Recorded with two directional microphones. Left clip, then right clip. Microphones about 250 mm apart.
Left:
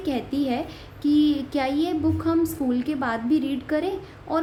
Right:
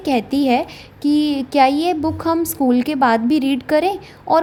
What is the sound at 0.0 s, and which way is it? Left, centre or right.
A woman's voice, right.